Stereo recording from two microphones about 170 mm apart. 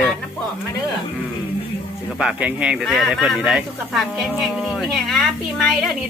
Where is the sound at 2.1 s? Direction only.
5° right (ahead or behind).